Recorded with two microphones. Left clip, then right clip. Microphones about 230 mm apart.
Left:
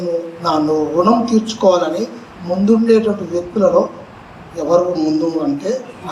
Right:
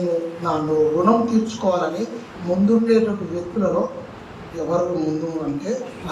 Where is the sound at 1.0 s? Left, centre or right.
Left.